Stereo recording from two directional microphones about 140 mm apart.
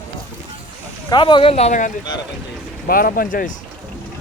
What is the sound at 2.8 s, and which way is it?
Speech, 90° left.